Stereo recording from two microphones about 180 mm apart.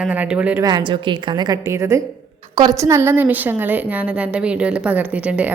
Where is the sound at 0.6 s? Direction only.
25° right (ahead or behind).